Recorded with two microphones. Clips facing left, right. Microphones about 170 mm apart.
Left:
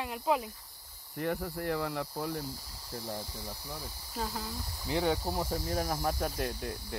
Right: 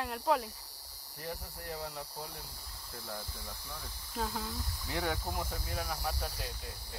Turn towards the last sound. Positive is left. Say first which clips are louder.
# left 8 dB
turn(degrees=60)  # may be behind; listen again after turning